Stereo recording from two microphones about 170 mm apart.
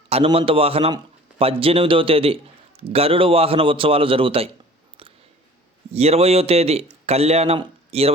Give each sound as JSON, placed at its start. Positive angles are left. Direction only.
{"t": 0.1, "sound": "a man's voice", "side_deg": -35}
{"t": 5.9, "sound": "a man's voice", "side_deg": -35}